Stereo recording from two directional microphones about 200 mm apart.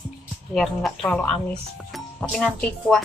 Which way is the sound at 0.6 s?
5° left (ahead or behind).